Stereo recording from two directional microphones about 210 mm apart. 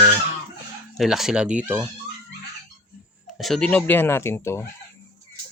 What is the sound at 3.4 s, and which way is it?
Speech, centre (ahead or behind).